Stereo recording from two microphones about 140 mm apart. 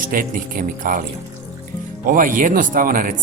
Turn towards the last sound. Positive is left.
turn(degrees=-85)